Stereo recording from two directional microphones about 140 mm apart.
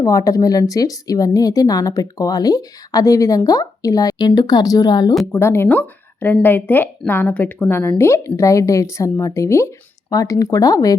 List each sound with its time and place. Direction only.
0.0 s a woman's voice: 25° left (ahead or behind)
5.2 s a woman's voice: 15° left (ahead or behind)